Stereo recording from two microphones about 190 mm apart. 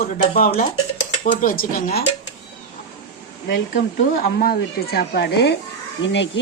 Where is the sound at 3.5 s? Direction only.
55° left (ahead or behind).